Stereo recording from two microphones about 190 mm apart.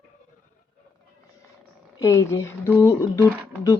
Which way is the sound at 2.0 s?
15° left (ahead or behind).